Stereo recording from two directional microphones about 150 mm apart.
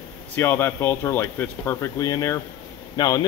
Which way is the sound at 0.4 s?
15° left (ahead or behind).